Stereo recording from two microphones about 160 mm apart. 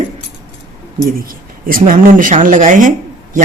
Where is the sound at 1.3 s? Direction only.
60° right (ahead or behind).